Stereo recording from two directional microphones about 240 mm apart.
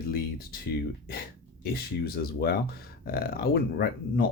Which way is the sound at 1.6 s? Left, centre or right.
Left.